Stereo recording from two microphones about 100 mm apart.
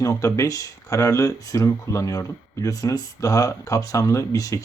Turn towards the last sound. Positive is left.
turn(degrees=35)  # may be behind; listen again after turning